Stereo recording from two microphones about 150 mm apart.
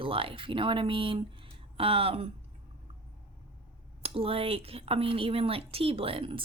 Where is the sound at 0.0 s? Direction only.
35° right (ahead or behind).